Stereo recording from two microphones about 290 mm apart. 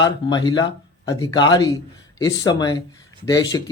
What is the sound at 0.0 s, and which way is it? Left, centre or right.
Speech, centre.